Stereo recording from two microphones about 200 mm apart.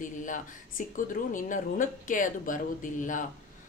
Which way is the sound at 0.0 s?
40° left (ahead or behind).